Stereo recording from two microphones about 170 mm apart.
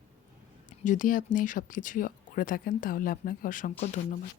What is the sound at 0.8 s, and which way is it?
Speech, 50° left (ahead or behind).